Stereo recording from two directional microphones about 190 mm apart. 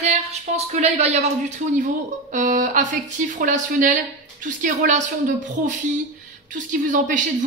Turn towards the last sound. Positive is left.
turn(degrees=-40)  # may be behind; listen again after turning